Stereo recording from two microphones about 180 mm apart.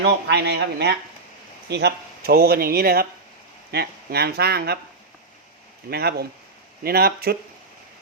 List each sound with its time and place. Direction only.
0.0 s speech: 65° right (ahead or behind)
5.9 s speech: 60° right (ahead or behind)